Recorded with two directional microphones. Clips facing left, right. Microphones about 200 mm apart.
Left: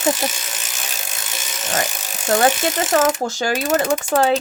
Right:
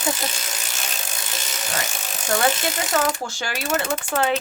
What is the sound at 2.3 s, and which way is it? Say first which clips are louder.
Speech: left 5 dB; 35° left (ahead or behind).